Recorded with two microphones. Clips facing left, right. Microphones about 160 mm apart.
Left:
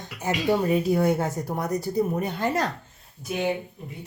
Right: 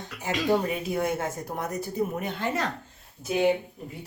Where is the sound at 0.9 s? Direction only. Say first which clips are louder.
Left 5 dB; 35° left (ahead or behind).